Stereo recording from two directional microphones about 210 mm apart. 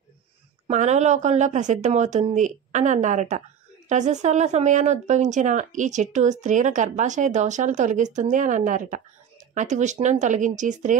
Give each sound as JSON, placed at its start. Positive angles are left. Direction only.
{"t": 0.7, "sound": "speech", "side_deg": -35}